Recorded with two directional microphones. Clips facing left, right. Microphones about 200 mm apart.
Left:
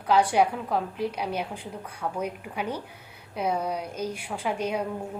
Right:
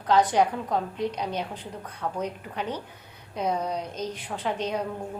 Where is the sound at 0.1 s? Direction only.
10° left (ahead or behind).